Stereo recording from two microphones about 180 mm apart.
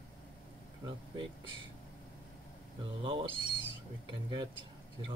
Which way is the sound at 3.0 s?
30° right (ahead or behind).